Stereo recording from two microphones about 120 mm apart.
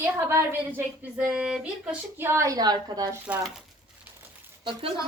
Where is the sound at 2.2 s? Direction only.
20° right (ahead or behind).